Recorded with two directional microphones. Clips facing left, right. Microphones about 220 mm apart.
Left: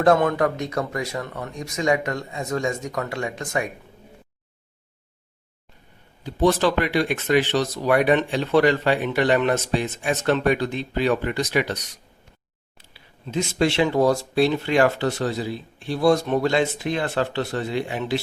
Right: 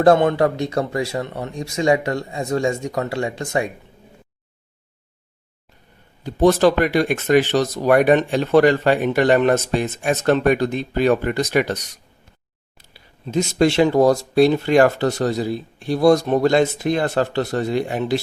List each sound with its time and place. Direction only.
0.0 s speech: 30° right (ahead or behind)
6.2 s speech: 45° right (ahead or behind)
12.9 s speech: 45° right (ahead or behind)